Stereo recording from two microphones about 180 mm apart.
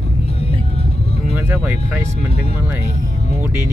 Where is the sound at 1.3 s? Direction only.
10° right (ahead or behind).